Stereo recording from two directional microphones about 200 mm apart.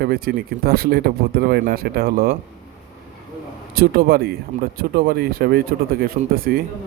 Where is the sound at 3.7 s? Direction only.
50° right (ahead or behind).